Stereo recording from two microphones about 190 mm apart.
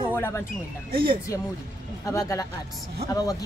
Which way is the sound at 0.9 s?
30° right (ahead or behind).